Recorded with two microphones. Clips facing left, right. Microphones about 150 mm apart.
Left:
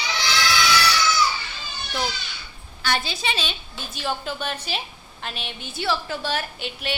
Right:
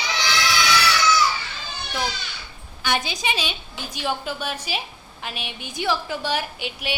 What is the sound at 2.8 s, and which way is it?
A woman's voice, 15° right (ahead or behind).